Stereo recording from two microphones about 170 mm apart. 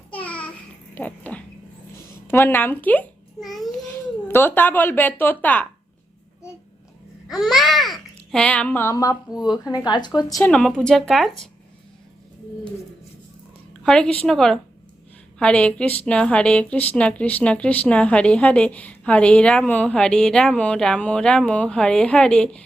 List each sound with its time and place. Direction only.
0.1 s a sound: 10° left (ahead or behind)
0.9 s dog: 10° left (ahead or behind)
2.2 s a child's voice: 15° left (ahead or behind)
3.8 s speech: 10° left (ahead or behind)
7.3 s a child's voice: centre (ahead or behind); by 10.4 s 20° left (ahead or behind)
10.4 s speech: 5° left (ahead or behind)
13.8 s speech: 5° left (ahead or behind)